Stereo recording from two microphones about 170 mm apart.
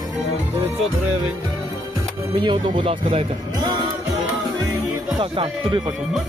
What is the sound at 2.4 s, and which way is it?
Speech, 30° right (ahead or behind).